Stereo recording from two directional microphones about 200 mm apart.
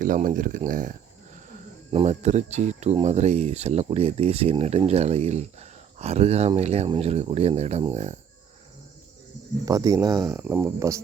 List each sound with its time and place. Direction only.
0.0 s speech: 40° right (ahead or behind)
9.6 s speech: 20° right (ahead or behind)